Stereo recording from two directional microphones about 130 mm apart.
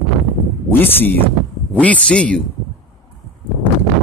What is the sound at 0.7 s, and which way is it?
A man's voice, 15° left (ahead or behind).